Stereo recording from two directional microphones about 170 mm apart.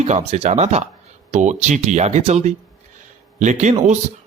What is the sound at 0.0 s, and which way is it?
Speech, 40° right (ahead or behind).